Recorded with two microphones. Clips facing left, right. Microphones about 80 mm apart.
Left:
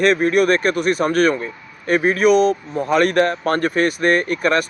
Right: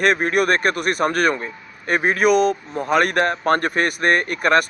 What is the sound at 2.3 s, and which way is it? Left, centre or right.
Speech, left.